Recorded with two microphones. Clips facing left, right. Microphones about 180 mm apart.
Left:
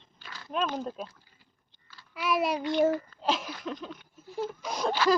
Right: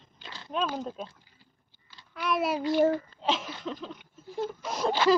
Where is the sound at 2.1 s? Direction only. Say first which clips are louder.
Even; centre (ahead or behind).